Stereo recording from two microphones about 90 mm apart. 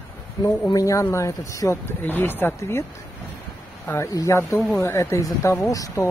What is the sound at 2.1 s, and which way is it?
Speech, 20° left (ahead or behind).